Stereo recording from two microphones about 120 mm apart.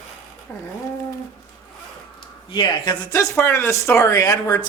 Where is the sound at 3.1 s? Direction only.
20° left (ahead or behind).